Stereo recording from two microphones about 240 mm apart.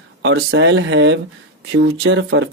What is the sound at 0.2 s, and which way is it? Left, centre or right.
Speech, right.